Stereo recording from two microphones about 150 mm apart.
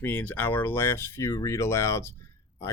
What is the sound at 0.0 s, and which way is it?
Speech, 10° left (ahead or behind).